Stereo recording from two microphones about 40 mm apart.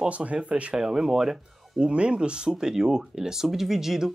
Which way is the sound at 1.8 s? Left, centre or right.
Right.